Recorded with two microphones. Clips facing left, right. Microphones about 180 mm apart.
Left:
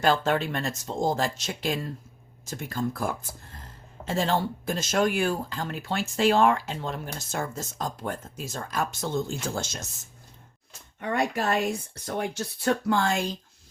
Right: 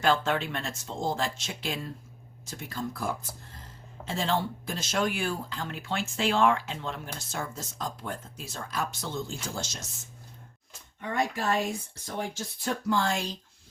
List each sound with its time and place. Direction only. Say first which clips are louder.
0.0 s speech: left 3 dB; 40° left (ahead or behind)
11.0 s speech: left 3 dB; 70° left (ahead or behind); by 13.3 s 55° left (ahead or behind)